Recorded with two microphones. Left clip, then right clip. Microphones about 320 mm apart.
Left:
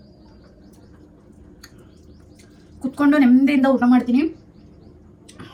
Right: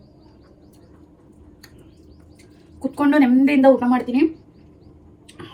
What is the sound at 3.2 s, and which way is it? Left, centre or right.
A woman's voice, centre.